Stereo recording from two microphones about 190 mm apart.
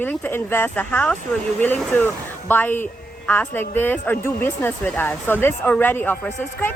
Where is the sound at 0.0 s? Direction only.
10° left (ahead or behind).